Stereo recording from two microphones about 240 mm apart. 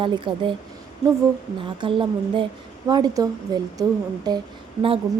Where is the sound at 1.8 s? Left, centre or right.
Right.